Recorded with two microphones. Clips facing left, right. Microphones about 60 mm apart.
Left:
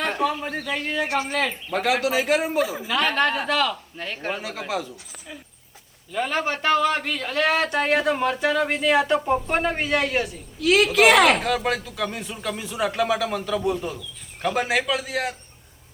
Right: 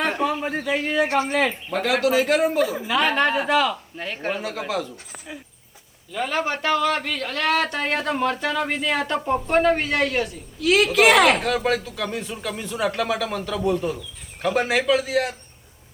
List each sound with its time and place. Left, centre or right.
0.0 s a man's voice: centre
1.0 s speech: right
1.3 s speech: centre
1.8 s speech: centre
6.3 s speech: left
7.2 s speech: centre
10.6 s speech: centre